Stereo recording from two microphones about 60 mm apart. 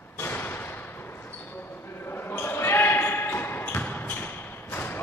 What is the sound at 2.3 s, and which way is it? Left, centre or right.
Basketball bounce, left.